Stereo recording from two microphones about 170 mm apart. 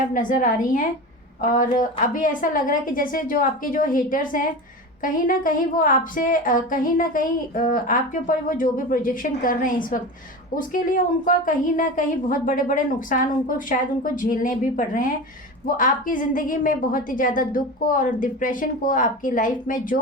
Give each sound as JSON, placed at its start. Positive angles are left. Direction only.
{"t": 0.1, "sound": "a woman's voice", "side_deg": 50}